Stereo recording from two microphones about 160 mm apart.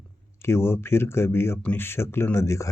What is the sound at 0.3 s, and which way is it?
Speech, 15° left (ahead or behind).